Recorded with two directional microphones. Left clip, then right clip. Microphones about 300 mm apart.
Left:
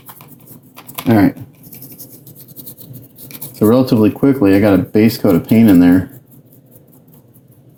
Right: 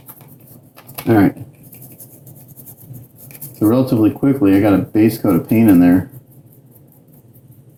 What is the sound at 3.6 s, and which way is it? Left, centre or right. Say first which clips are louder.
Speech: left 2 dB; left.